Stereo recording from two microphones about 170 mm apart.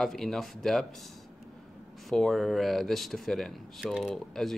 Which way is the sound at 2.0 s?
Centre (ahead or behind).